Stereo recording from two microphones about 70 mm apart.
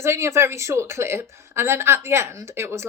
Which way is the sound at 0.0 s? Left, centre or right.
Right.